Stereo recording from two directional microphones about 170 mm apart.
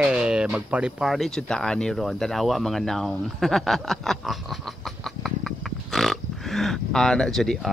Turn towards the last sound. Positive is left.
turn(degrees=0)  # may be behind; listen again after turning